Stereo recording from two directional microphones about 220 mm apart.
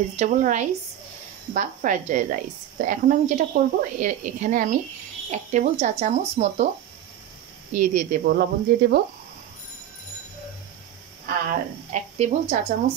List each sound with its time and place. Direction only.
0.1 s a woman's voice: 35° right (ahead or behind)
7.7 s a woman's voice: 35° right (ahead or behind)
11.9 s speech: 30° right (ahead or behind)